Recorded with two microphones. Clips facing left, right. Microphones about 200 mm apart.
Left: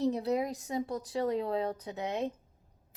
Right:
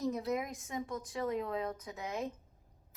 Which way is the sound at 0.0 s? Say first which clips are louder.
Left 5 dB; 35° left (ahead or behind).